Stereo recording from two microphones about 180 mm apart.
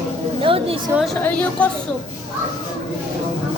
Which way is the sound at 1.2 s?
10° left (ahead or behind).